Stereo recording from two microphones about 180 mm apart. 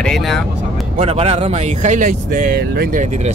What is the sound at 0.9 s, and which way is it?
Speech, 35° right (ahead or behind).